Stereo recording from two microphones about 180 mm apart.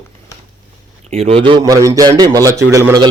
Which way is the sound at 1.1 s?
35° right (ahead or behind).